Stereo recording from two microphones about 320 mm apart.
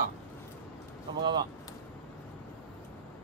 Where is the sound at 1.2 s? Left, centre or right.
Centre.